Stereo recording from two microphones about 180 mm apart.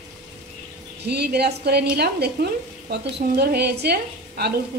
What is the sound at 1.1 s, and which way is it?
Speech, 65° right (ahead or behind).